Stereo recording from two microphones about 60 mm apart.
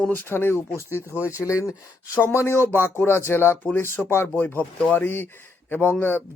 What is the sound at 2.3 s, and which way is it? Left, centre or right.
Speech, left.